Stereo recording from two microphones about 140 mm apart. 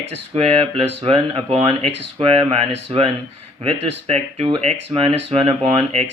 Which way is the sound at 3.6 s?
45° right (ahead or behind).